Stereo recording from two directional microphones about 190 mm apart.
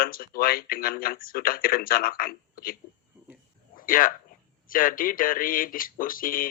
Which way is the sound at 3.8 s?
45° left (ahead or behind).